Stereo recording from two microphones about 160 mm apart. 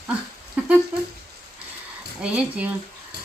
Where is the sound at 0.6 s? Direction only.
10° right (ahead or behind).